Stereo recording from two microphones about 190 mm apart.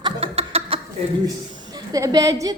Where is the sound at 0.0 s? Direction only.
30° right (ahead or behind).